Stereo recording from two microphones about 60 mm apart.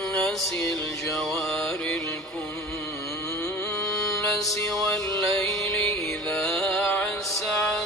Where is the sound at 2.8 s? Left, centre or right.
Left.